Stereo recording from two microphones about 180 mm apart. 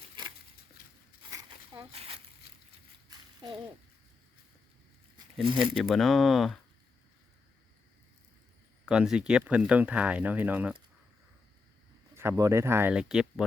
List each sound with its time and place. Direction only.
1.3 s a sound: 25° right (ahead or behind)
5.7 s speech: centre (ahead or behind)
8.9 s speech: 5° right (ahead or behind)
12.1 s speech: 15° right (ahead or behind)